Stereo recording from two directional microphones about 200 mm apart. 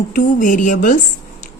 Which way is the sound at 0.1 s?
40° left (ahead or behind).